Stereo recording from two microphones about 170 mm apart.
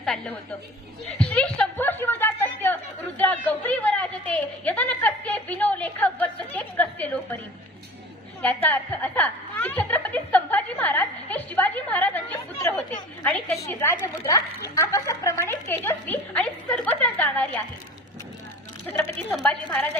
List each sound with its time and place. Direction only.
0.0 s a woman's voice: 5° left (ahead or behind)
8.4 s a woman's voice: 10° left (ahead or behind)
19.1 s a woman's voice: centre (ahead or behind)